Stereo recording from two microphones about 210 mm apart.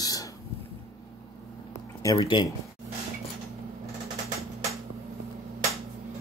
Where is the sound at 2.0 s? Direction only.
20° left (ahead or behind).